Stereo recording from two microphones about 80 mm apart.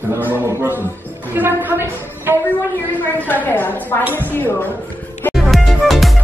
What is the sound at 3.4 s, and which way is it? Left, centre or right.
Speech, left.